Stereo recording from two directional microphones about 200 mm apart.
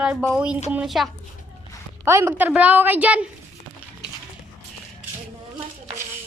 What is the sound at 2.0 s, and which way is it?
A woman's voice, 10° right (ahead or behind).